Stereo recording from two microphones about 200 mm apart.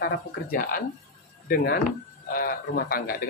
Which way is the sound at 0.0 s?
45° left (ahead or behind).